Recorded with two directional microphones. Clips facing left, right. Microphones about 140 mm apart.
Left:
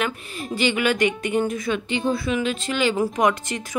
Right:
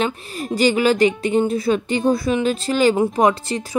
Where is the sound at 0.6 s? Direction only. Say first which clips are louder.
Right 5 dB; 35° right (ahead or behind).